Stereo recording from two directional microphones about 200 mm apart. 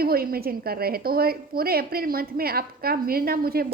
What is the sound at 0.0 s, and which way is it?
A woman's voice, 50° right (ahead or behind).